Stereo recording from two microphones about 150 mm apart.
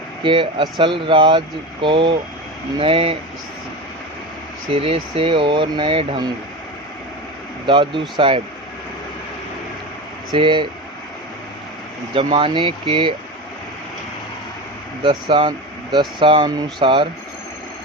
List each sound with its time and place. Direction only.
0.2 s speech: 35° right (ahead or behind)
4.7 s speech: 40° right (ahead or behind)
7.7 s speech: 35° right (ahead or behind)
10.3 s speech: 35° right (ahead or behind)
12.1 s speech: 35° right (ahead or behind)
15.0 s speech: 35° right (ahead or behind)